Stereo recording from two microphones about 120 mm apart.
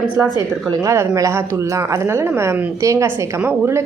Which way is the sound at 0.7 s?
25° right (ahead or behind).